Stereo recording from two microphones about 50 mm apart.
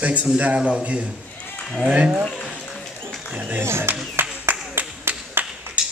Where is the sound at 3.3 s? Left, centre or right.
Right.